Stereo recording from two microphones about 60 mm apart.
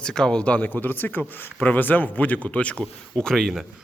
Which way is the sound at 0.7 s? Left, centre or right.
Left.